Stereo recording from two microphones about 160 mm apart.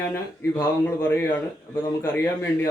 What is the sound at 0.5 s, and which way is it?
A man's voice, 15° left (ahead or behind).